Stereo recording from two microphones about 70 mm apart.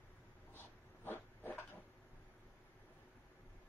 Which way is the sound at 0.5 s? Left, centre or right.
Left.